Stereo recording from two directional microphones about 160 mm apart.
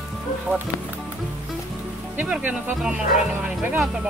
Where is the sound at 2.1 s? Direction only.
10° right (ahead or behind).